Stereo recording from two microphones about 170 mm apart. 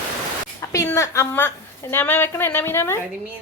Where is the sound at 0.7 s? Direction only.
15° left (ahead or behind).